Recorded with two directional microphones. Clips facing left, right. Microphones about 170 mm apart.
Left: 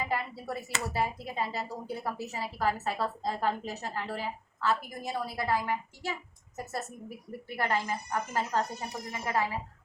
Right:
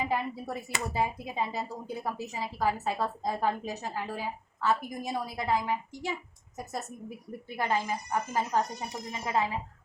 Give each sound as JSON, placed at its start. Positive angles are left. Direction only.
{"t": 0.0, "sound": "speech", "side_deg": -20}
{"t": 7.5, "sound": "speech", "side_deg": -15}